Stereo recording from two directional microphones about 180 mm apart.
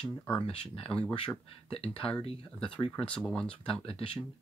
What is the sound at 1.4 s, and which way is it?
Speech, 35° left (ahead or behind).